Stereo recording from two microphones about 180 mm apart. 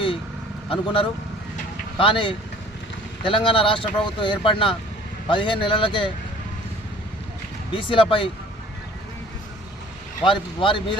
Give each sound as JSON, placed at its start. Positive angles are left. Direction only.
{"t": 0.7, "sound": "speech", "side_deg": 30}
{"t": 7.7, "sound": "speech", "side_deg": 30}
{"t": 10.2, "sound": "speech", "side_deg": 30}